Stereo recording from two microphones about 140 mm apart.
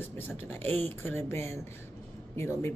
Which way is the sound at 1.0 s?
15° left (ahead or behind).